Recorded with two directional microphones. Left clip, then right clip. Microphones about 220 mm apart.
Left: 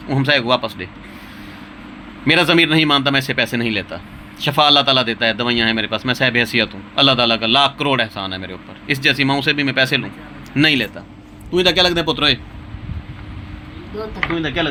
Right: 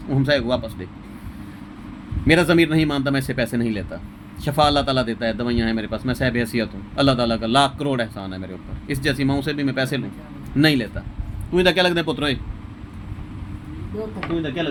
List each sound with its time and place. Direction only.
0.1 s speech: 15° right (ahead or behind)
2.2 s speech: 15° right (ahead or behind)